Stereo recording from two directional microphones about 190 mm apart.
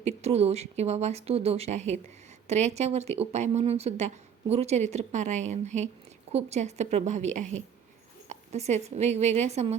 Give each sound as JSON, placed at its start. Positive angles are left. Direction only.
{"t": 0.0, "sound": "speech", "side_deg": -35}